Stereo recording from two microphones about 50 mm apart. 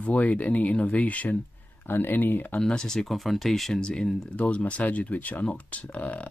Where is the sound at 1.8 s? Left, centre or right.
Left.